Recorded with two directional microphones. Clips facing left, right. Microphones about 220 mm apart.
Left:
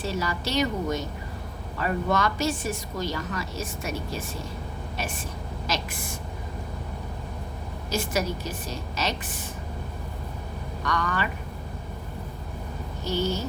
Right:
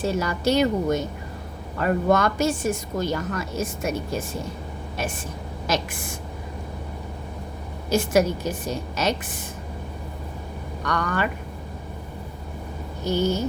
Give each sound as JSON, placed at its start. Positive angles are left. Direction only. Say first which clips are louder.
{"t": 0.0, "sound": "a woman's voice", "louder": "right 6 dB", "side_deg": -50}
{"t": 5.6, "sound": "a woman's voice", "louder": "right 6 dB", "side_deg": -50}
{"t": 7.9, "sound": "a woman's voice", "louder": "right 8 dB", "side_deg": -50}
{"t": 10.8, "sound": "a woman's voice", "louder": "right 3 dB", "side_deg": -50}
{"t": 13.1, "sound": "a woman's voice", "louder": "right 4 dB", "side_deg": -50}